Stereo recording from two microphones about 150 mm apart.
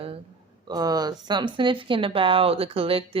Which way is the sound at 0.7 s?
25° right (ahead or behind).